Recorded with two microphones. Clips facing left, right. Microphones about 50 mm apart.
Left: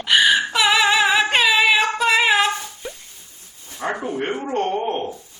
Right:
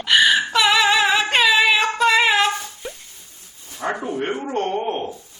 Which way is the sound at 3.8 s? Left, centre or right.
Centre.